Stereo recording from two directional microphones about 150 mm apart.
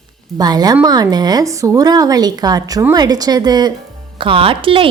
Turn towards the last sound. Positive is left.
turn(degrees=-35)  # may be behind; listen again after turning